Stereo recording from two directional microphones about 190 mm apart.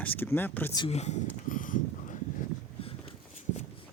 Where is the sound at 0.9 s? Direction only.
35° left (ahead or behind).